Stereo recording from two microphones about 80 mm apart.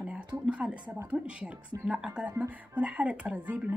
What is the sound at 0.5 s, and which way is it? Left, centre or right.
Speech, centre.